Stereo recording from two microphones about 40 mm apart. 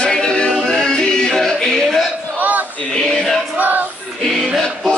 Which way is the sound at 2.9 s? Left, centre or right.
Centre.